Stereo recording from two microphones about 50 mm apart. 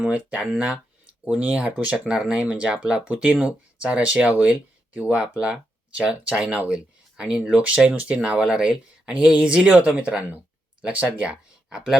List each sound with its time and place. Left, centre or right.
0.0 s speech: right
2.0 s speech: centre
11.7 s speech: centre